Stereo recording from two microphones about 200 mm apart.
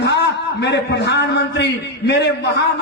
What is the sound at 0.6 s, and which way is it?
A man's voice, 60° left (ahead or behind).